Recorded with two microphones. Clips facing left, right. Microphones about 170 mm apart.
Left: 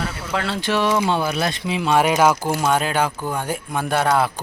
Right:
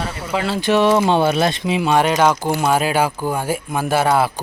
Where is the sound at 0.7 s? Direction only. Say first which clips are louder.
Right 5 dB; 25° right (ahead or behind).